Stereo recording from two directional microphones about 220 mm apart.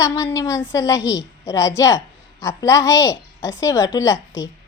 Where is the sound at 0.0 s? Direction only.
15° left (ahead or behind).